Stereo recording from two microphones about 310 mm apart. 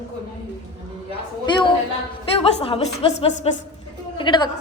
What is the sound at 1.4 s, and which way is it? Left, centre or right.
A woman's voice, centre.